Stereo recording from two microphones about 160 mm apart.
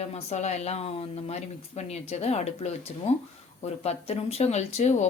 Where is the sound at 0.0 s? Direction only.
40° left (ahead or behind).